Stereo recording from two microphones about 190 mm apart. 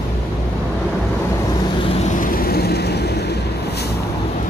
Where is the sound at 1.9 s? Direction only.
40° left (ahead or behind).